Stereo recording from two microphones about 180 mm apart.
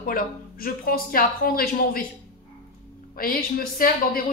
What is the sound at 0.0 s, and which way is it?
A woman's voice, 55° left (ahead or behind).